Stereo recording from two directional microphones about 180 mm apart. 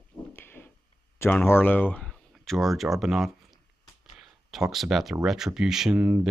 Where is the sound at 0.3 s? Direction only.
10° left (ahead or behind).